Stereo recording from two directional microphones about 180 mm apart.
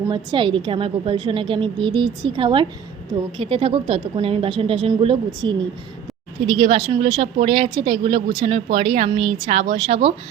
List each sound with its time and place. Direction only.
0.1 s a woman's voice: 25° right (ahead or behind)